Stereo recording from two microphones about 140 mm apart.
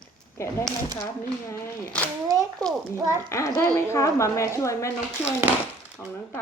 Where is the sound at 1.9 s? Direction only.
10° left (ahead or behind).